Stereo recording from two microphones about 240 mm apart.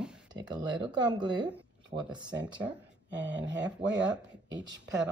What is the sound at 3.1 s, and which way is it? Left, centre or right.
Speech, right.